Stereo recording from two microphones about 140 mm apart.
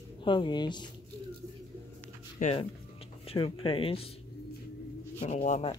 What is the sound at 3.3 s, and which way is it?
Speech, 40° left (ahead or behind).